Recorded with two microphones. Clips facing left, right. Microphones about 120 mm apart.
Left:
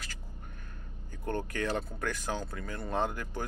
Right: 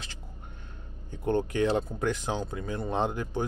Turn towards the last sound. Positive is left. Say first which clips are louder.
# right 4 dB
turn(degrees=-20)  # may be behind; listen again after turning